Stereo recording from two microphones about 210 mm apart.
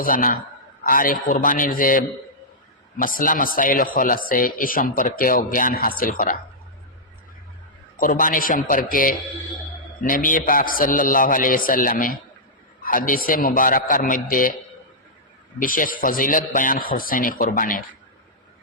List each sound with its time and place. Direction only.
0.0 s speech: 40° left (ahead or behind)
7.9 s speech: 40° left (ahead or behind)
15.6 s speech: 40° left (ahead or behind)